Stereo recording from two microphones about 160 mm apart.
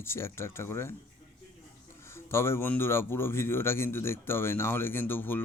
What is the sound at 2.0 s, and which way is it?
Speech, 15° left (ahead or behind).